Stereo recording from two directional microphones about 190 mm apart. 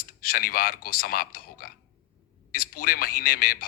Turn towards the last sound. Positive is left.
turn(degrees=50)  # may be behind; listen again after turning